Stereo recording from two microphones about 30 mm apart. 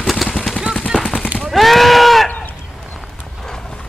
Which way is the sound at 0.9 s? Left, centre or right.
Left.